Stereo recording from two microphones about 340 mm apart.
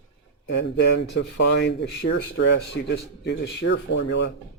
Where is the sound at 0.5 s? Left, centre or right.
Left.